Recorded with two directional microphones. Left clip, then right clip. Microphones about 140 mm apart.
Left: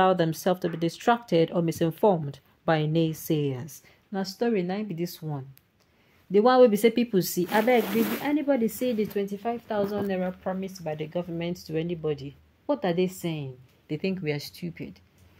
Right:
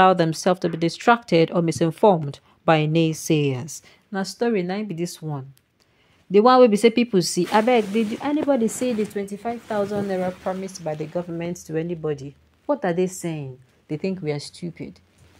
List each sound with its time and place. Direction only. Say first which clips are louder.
0.0 s speech: right 6 dB; 25° right (ahead or behind)
11.5 s speech: right 4 dB; centre (ahead or behind)
12.7 s speech: right 4 dB; 5° left (ahead or behind)
13.8 s speech: right 3 dB; 15° right (ahead or behind)